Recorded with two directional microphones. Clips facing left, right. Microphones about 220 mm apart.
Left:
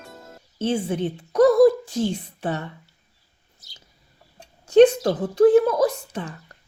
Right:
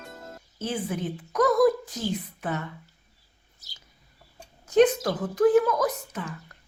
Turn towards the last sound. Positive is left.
turn(degrees=30)  # may be behind; listen again after turning